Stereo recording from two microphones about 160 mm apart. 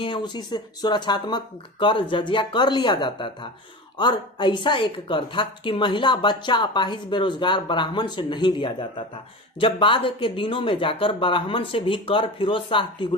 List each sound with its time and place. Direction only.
0.0 s a woman's voice: 30° left (ahead or behind)